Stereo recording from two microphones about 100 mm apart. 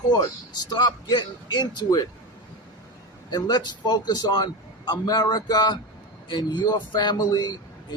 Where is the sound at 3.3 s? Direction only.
45° left (ahead or behind).